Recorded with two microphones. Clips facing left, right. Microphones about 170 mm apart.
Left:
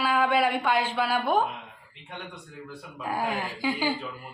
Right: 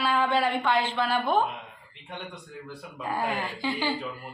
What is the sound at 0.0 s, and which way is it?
A woman's voice, 10° left (ahead or behind).